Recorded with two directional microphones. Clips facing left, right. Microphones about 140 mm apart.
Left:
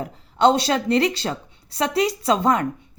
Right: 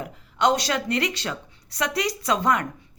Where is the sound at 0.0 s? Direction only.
30° left (ahead or behind).